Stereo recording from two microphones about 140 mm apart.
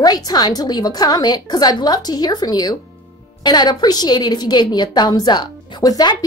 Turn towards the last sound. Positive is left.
turn(degrees=30)  # may be behind; listen again after turning